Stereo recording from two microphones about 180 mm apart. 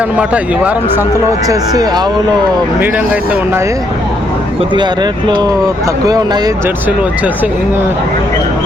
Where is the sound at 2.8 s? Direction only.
10° right (ahead or behind).